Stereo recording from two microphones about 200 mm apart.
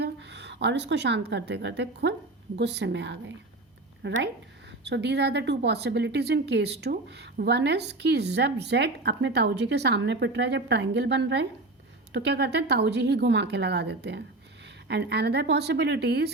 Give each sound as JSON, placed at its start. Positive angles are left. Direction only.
{"t": 0.0, "sound": "a woman's voice", "side_deg": -60}